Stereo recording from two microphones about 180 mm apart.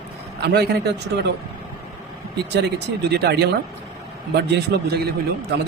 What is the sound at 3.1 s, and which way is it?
A man's voice, 65° right (ahead or behind).